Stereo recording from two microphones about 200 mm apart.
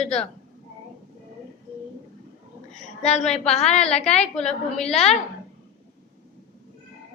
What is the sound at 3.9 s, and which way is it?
Speech, 30° left (ahead or behind).